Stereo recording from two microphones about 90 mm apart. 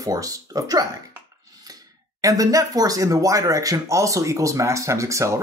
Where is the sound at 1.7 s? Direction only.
45° right (ahead or behind).